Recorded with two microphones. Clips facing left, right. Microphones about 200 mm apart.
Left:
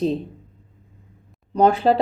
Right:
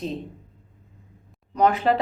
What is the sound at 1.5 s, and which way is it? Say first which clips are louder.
Speech: left 4 dB; 30° left (ahead or behind).